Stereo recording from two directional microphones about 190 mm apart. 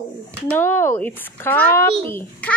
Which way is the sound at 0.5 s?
10° left (ahead or behind).